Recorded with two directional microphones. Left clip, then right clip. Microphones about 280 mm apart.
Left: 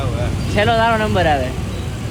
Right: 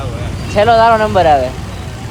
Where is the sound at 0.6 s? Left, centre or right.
Right.